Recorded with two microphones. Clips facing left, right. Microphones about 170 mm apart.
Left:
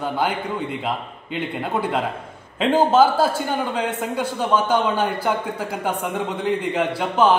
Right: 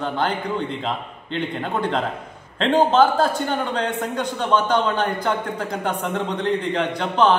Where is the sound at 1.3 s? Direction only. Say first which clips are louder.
Even; 10° left (ahead or behind).